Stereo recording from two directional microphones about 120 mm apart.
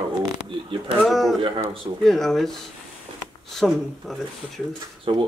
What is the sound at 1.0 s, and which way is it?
Speech, centre (ahead or behind).